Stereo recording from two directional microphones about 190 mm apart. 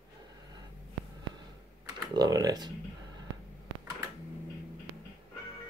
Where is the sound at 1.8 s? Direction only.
20° right (ahead or behind).